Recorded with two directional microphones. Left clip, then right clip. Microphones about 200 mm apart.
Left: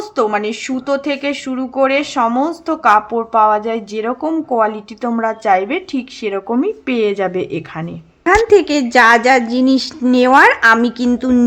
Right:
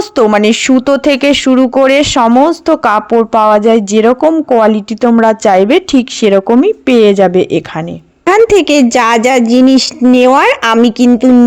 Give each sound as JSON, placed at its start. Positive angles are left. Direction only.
{"t": 0.2, "sound": "a woman's voice", "side_deg": -40}